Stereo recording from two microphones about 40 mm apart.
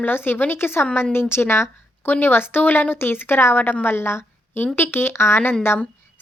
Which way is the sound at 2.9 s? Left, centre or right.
Left.